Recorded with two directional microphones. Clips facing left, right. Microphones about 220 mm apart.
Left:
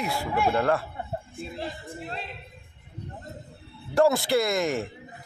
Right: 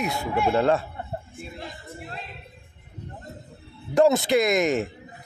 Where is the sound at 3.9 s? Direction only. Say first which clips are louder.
Right 3 dB; 20° right (ahead or behind).